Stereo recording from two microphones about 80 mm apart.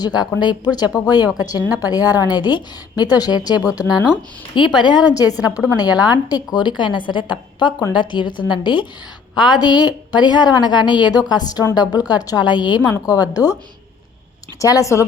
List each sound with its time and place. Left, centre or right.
0.3 s a woman's voice: left
4.5 s a woman's voice: left
9.3 s a woman's voice: left
13.3 s a woman's voice: left
14.6 s a woman's voice: left